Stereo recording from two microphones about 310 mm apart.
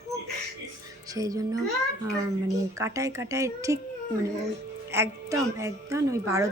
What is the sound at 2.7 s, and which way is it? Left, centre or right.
A woman's voice, centre.